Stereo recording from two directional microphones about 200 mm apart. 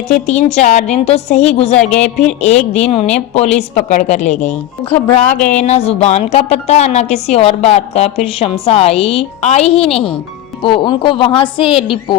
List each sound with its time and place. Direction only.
0.1 s speech: 35° left (ahead or behind)
1.7 s speech: 5° left (ahead or behind)
2.7 s speech: 30° left (ahead or behind)